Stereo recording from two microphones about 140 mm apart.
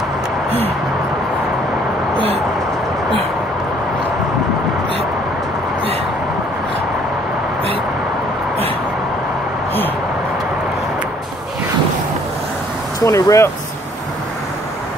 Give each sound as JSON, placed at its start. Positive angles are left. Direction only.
{"t": 13.0, "sound": "speech", "side_deg": 20}